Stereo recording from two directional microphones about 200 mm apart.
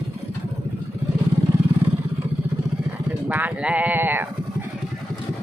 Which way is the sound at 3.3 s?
10° right (ahead or behind).